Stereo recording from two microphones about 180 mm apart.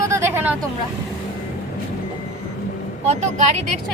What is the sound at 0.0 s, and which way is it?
Vehicle, 15° right (ahead or behind).